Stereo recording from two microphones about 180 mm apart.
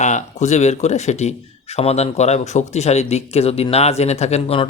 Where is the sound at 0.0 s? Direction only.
40° left (ahead or behind).